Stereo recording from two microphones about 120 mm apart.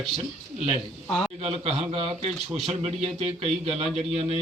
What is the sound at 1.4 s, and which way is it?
A man's voice, 55° right (ahead or behind).